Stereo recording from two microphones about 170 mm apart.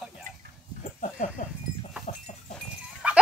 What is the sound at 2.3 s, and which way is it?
Livestock, 45° left (ahead or behind).